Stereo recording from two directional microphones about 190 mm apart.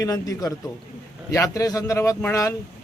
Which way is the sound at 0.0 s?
20° left (ahead or behind).